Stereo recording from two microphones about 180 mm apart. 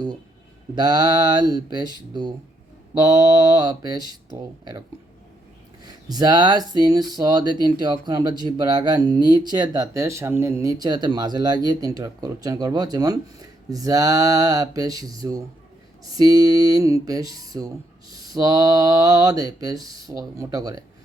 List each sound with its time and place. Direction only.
0.8 s speech: 25° right (ahead or behind)
5.8 s speech: 20° right (ahead or behind)